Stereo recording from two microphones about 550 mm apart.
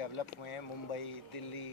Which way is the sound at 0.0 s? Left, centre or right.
Left.